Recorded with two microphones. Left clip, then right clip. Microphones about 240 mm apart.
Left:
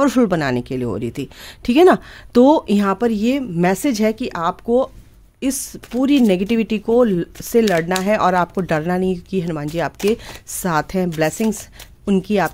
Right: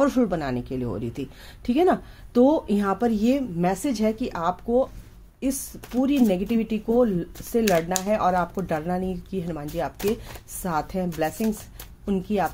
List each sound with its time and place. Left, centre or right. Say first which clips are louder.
0.0 s speech: left 6 dB; left